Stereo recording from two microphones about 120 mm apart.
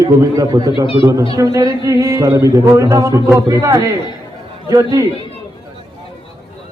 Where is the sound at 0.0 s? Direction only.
30° right (ahead or behind).